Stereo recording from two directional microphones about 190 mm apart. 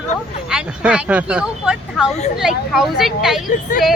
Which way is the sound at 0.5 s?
5° right (ahead or behind).